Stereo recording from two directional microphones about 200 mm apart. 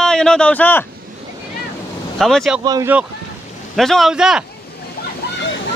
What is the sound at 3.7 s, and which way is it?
Speech, centre (ahead or behind).